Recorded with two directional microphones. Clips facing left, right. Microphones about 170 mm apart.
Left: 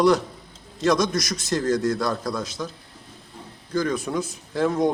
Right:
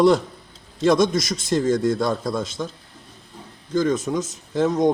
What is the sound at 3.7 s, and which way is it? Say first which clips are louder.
A man's voice: right 3 dB; 20° right (ahead or behind).